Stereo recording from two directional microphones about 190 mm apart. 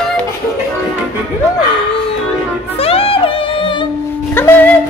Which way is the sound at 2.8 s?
30° left (ahead or behind).